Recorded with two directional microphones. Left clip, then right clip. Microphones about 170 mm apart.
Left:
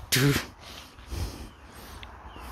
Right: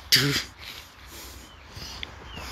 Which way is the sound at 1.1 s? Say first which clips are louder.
Left 4 dB; 50° left (ahead or behind).